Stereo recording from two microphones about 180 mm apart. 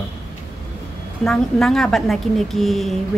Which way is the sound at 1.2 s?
5° left (ahead or behind).